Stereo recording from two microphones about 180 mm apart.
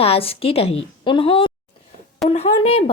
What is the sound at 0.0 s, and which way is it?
A woman's voice, 35° left (ahead or behind).